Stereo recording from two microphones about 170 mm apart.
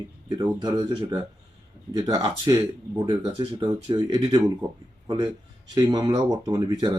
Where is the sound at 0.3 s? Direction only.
25° right (ahead or behind).